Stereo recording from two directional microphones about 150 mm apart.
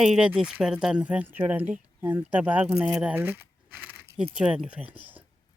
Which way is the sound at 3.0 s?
10° right (ahead or behind).